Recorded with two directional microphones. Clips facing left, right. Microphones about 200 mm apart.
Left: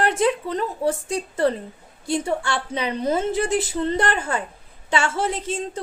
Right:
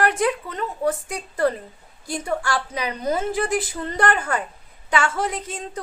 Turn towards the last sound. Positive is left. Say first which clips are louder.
# left 4 dB
turn(degrees=25)  # may be behind; listen again after turning